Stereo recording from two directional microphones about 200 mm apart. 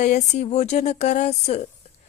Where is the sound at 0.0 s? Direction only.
35° left (ahead or behind).